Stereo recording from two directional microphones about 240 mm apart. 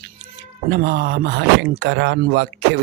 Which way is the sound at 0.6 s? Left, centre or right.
Right.